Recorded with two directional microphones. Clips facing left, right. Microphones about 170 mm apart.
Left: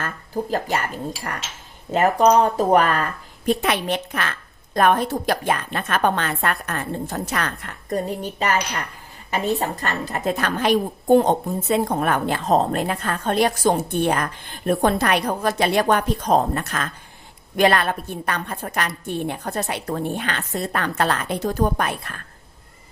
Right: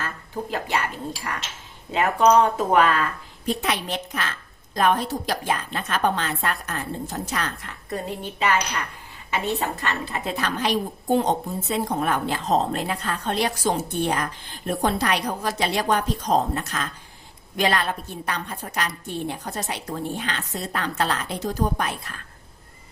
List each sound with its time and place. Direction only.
1.9 s speech: 40° left (ahead or behind); by 7.7 s 60° left (ahead or behind)
7.9 s a woman's voice: 40° left (ahead or behind); by 22.1 s 55° left (ahead or behind)